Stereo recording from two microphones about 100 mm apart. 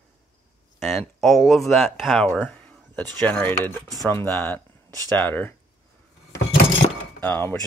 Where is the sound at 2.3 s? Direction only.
15° left (ahead or behind).